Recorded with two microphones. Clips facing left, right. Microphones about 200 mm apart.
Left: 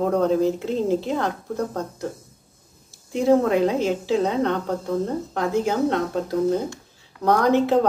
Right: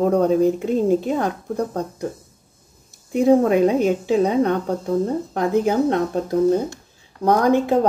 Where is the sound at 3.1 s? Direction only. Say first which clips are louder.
Right 3 dB; 15° right (ahead or behind).